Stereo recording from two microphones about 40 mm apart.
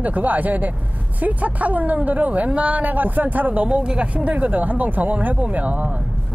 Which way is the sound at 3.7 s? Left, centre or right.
Right.